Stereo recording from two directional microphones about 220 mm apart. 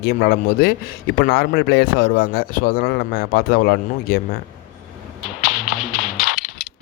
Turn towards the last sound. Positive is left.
turn(degrees=5)  # may be behind; listen again after turning